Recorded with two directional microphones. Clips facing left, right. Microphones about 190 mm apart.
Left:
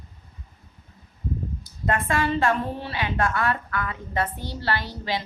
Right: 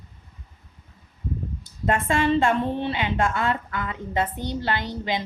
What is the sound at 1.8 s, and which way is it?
A woman's voice, 25° right (ahead or behind).